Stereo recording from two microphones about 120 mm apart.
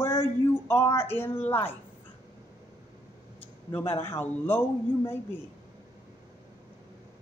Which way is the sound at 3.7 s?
20° left (ahead or behind).